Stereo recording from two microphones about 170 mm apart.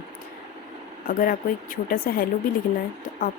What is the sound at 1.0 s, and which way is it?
Speech, 55° left (ahead or behind).